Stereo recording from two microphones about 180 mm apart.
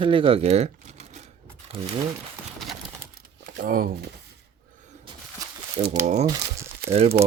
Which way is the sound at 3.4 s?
50° right (ahead or behind).